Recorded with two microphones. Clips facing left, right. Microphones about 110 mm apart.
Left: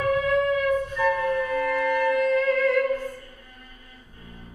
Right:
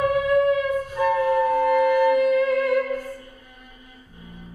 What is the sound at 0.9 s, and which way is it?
Music, 20° right (ahead or behind).